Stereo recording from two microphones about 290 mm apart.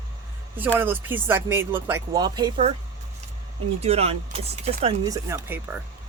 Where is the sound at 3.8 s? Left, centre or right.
Right.